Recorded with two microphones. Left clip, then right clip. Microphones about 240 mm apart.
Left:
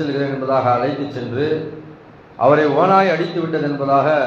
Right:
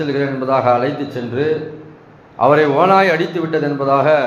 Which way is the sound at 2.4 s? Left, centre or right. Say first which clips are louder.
Right 2 dB; right.